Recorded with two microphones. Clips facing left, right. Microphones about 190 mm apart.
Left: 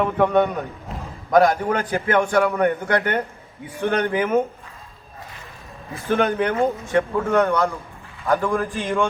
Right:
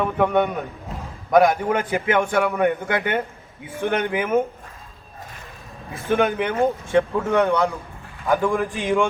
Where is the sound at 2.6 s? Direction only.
15° right (ahead or behind).